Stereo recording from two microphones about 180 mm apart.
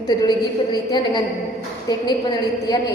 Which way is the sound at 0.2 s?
25° left (ahead or behind).